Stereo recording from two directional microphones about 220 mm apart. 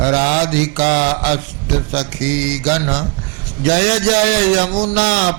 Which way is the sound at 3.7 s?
10° right (ahead or behind).